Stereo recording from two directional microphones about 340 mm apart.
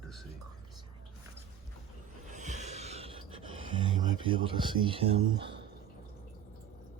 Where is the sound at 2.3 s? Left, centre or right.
Right.